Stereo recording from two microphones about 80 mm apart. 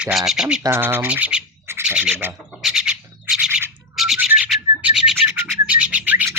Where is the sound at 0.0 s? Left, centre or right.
Centre.